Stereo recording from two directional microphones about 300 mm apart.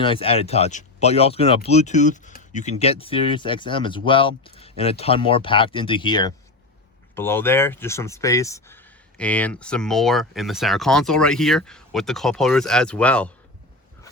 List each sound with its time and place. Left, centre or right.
0.0 s speech: centre